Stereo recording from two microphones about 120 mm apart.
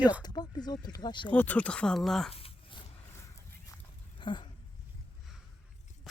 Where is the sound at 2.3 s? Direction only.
55° left (ahead or behind).